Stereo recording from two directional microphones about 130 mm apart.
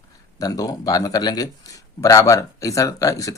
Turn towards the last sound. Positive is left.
turn(degrees=25)  # may be behind; listen again after turning